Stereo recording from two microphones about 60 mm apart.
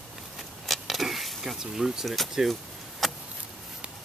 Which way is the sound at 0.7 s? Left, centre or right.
Centre.